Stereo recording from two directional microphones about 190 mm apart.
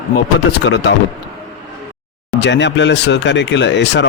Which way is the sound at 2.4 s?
70° left (ahead or behind).